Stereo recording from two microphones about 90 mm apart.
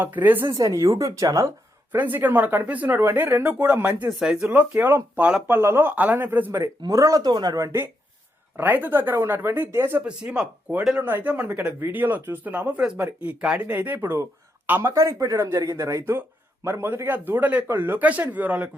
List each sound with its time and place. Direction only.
0.0 s speech: 20° right (ahead or behind)
0.4 s speech: 45° right (ahead or behind)
1.9 s speech: 20° right (ahead or behind)
4.1 s speech: 5° right (ahead or behind)
4.4 s speech: 15° right (ahead or behind)
6.8 s speech: 40° right (ahead or behind)
7.3 s speech: 50° right (ahead or behind); by 7.9 s 35° right (ahead or behind)
8.5 s speech: 20° right (ahead or behind)
10.0 s speech: 10° right (ahead or behind)